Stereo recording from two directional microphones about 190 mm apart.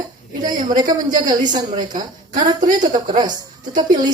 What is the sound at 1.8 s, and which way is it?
A woman's voice, 40° right (ahead or behind).